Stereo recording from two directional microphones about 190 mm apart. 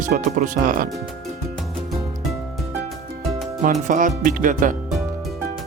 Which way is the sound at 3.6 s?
45° right (ahead or behind).